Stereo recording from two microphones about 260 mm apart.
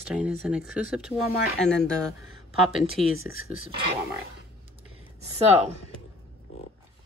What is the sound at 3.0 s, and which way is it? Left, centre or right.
Speech, centre.